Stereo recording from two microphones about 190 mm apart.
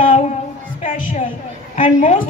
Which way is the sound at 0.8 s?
40° left (ahead or behind).